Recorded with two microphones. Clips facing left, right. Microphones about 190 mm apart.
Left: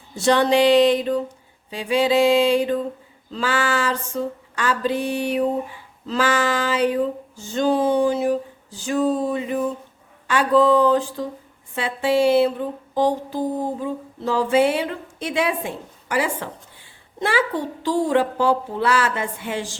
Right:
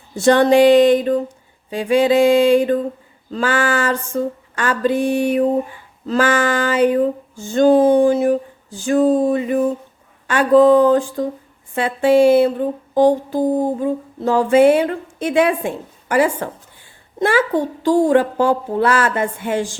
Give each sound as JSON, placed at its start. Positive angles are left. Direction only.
{"t": 0.2, "sound": "female singing", "side_deg": -50}